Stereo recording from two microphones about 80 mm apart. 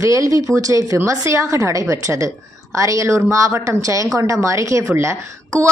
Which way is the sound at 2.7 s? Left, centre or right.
Right.